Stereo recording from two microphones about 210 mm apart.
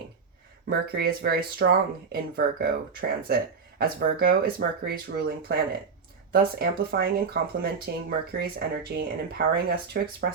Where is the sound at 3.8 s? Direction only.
45° right (ahead or behind).